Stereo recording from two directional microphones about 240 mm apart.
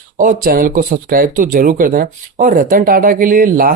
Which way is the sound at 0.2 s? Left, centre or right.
Right.